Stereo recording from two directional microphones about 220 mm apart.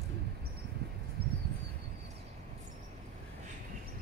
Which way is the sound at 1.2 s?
45° right (ahead or behind).